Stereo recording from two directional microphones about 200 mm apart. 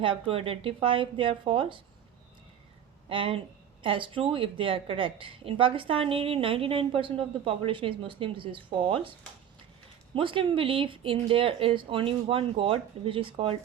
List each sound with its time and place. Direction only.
0.0 s a woman's voice: 25° right (ahead or behind)
3.1 s a woman's voice: 25° right (ahead or behind)
10.2 s a woman's voice: 25° right (ahead or behind)